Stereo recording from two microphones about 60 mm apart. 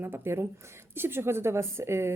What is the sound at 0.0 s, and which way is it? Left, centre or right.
A woman's voice, right.